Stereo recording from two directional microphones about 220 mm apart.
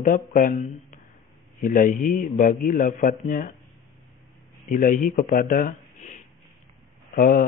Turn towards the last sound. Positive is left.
turn(degrees=45)  # may be behind; listen again after turning